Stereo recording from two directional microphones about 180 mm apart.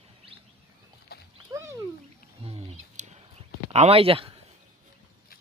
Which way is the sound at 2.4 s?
35° right (ahead or behind).